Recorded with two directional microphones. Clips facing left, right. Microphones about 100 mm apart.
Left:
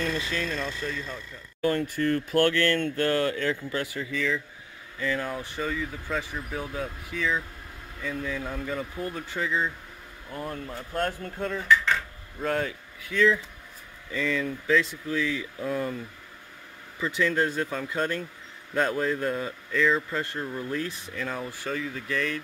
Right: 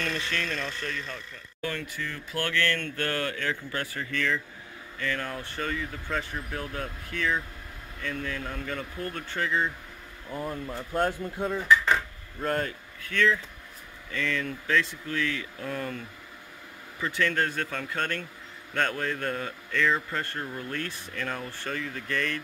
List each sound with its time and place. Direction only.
0.0 s speech: 15° left (ahead or behind)
1.6 s speech: 40° left (ahead or behind)
2.4 s speech: 30° left (ahead or behind)
3.8 s speech: 15° left (ahead or behind)
10.7 s speech: 10° right (ahead or behind)
12.4 s speech: centre (ahead or behind)
17.2 s speech: 5° left (ahead or behind)